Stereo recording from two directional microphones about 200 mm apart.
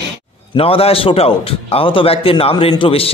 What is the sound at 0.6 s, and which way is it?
A man's voice, 30° left (ahead or behind).